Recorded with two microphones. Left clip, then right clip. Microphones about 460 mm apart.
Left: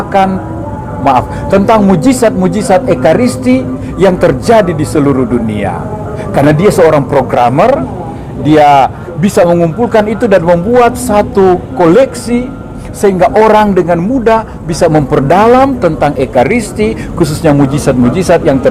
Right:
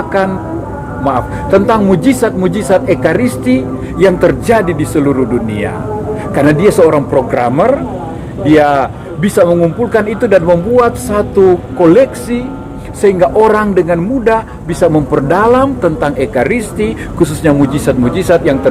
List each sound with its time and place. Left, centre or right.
1.5 s speech: left